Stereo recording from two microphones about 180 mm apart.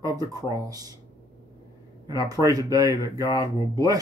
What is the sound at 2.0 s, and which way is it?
Speech, 20° right (ahead or behind).